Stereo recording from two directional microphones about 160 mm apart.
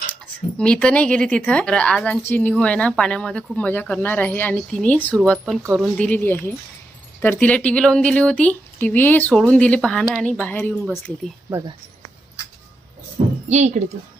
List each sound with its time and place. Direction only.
0.1 s speech: 5° left (ahead or behind)
13.5 s speech: 45° right (ahead or behind)